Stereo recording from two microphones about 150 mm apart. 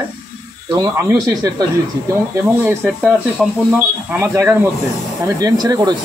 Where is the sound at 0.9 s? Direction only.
20° right (ahead or behind).